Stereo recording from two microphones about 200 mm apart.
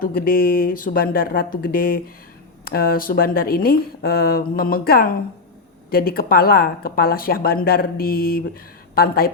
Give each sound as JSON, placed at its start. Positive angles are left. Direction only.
{"t": 0.0, "sound": "a woman's voice", "side_deg": 45}